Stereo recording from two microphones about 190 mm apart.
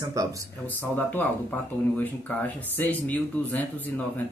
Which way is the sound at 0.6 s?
10° left (ahead or behind).